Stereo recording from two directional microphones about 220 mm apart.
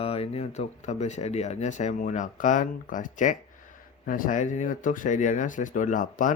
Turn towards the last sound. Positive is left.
turn(degrees=35)  # may be behind; listen again after turning